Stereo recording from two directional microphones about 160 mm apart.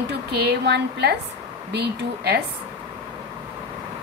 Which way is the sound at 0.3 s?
90° right.